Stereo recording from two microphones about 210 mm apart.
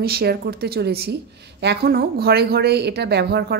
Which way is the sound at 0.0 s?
50° right (ahead or behind).